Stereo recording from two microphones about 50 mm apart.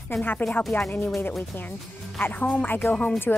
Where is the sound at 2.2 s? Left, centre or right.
Left.